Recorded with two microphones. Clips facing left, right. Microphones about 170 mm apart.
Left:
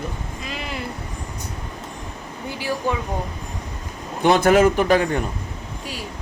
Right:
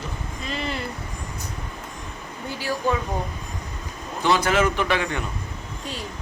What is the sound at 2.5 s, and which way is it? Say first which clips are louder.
Speech: left 2 dB; 15° left (ahead or behind).